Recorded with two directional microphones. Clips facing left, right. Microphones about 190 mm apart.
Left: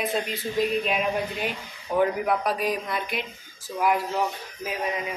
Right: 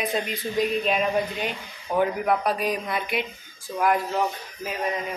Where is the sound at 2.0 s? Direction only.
Centre (ahead or behind).